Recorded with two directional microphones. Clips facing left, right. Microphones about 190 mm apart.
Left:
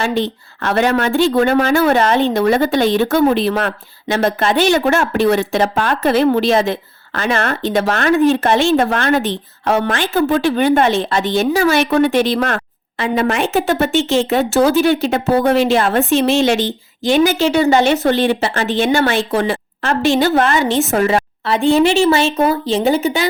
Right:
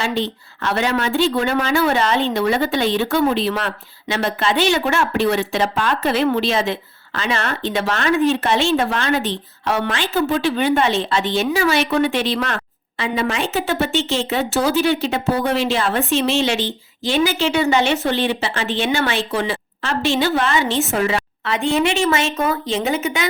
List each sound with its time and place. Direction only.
0.0 s speech: 50° left (ahead or behind); by 23.3 s 35° left (ahead or behind)